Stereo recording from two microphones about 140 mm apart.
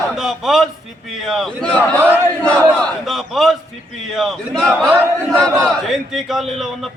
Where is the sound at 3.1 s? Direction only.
Centre (ahead or behind).